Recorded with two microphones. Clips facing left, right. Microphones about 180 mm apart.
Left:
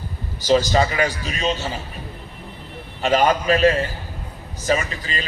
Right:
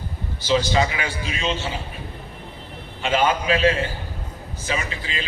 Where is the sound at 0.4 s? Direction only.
40° left (ahead or behind).